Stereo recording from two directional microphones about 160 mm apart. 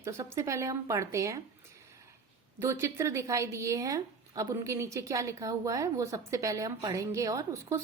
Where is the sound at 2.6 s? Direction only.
20° right (ahead or behind).